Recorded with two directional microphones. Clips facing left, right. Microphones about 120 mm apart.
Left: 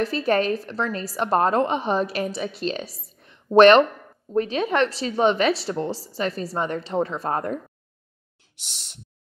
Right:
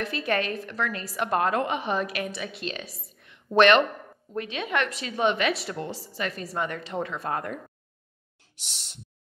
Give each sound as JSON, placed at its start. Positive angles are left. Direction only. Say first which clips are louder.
{"t": 0.0, "sound": "a woman's voice", "louder": "left 6 dB", "side_deg": 35}